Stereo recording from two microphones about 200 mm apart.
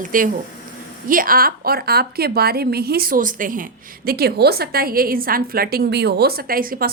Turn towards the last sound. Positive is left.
turn(degrees=-45)  # may be behind; listen again after turning